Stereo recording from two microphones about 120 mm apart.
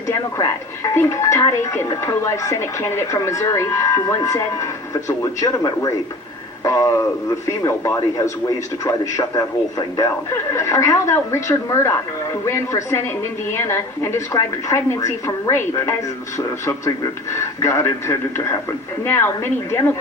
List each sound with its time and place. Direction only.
0.1 s a man's voice: 25° left (ahead or behind)